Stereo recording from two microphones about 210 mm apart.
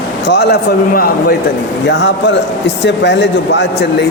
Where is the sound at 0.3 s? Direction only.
50° left (ahead or behind).